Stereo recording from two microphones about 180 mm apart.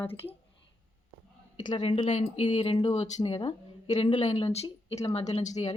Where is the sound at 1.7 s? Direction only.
25° left (ahead or behind).